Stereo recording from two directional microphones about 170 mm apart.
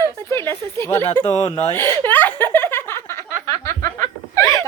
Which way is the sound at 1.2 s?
35° left (ahead or behind).